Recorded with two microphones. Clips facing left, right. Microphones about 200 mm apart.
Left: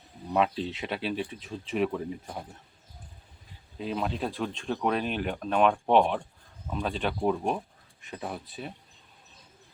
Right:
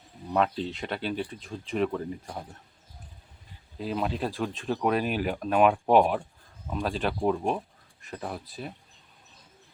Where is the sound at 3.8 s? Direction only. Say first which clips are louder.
Right 1 dB; centre (ahead or behind).